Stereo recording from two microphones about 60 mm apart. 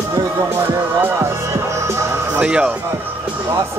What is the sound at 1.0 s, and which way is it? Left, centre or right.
Music, right.